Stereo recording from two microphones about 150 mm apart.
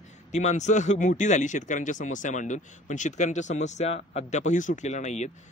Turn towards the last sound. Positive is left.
turn(degrees=50)  # may be behind; listen again after turning